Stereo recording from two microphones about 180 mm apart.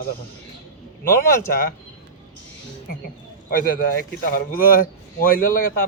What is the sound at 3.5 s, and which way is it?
A man's voice, 50° left (ahead or behind).